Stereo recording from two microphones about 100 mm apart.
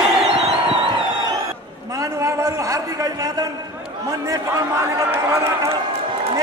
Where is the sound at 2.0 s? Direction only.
35° right (ahead or behind).